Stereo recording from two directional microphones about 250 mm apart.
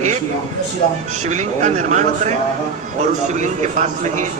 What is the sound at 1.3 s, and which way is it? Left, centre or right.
A man's voice, right.